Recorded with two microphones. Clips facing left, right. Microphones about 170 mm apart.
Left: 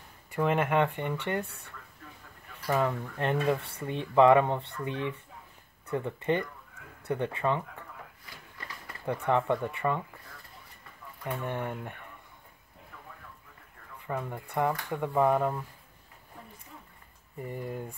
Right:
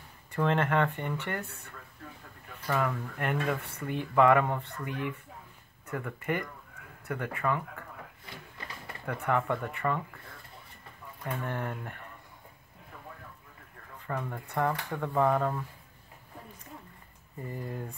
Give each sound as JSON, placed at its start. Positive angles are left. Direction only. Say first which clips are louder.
{"t": 0.3, "sound": "speech", "louder": "left 1 dB", "side_deg": 10}
{"t": 2.7, "sound": "speech", "louder": "left 2 dB", "side_deg": 20}
{"t": 9.0, "sound": "speech", "louder": "left 2 dB", "side_deg": 20}
{"t": 11.4, "sound": "speech", "louder": "left 3 dB", "side_deg": 20}
{"t": 14.0, "sound": "speech", "louder": "left 1 dB", "side_deg": 15}
{"t": 17.4, "sound": "speech", "louder": "left 2 dB", "side_deg": 15}